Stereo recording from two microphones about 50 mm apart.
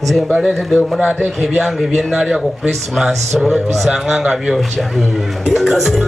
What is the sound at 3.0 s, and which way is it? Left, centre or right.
Speech, centre.